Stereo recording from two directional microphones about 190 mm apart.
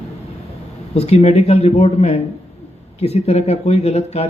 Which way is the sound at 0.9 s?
35° left (ahead or behind).